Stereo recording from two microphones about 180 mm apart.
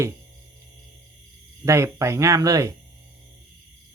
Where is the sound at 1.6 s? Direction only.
15° right (ahead or behind).